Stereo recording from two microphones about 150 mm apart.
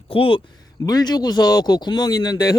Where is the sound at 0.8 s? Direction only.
25° left (ahead or behind).